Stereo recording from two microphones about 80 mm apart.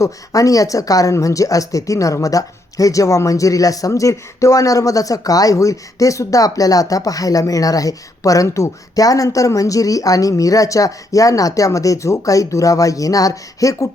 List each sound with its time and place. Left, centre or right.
0.0 s speech: left